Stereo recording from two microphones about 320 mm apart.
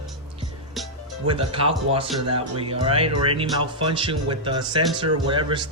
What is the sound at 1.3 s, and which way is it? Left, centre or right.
Speech, centre.